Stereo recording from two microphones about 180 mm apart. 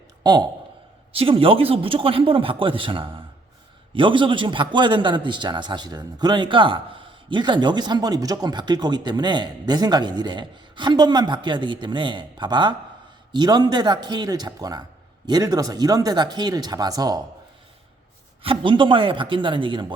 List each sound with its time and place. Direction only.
0.2 s a man's voice: 25° right (ahead or behind)
18.4 s a man's voice: 30° right (ahead or behind)